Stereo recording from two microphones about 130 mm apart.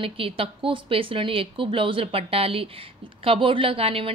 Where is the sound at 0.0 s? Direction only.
45° right (ahead or behind).